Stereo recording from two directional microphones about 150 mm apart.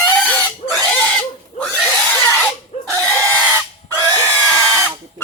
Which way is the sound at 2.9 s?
10° left (ahead or behind).